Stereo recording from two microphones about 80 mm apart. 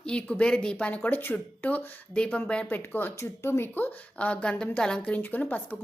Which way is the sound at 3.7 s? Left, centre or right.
Left.